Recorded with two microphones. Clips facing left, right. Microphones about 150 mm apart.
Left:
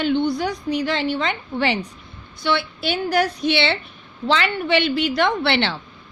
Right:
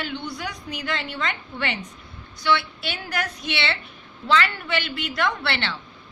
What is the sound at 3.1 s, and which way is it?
A woman's voice, 30° left (ahead or behind).